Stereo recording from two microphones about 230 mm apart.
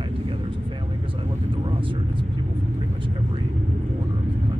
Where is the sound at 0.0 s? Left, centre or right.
Right.